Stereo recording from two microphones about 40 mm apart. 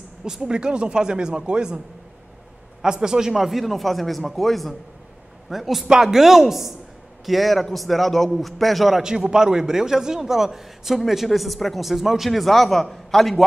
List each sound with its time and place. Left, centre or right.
0.2 s speech: centre
2.8 s a man's voice: centre
9.0 s a man's voice: centre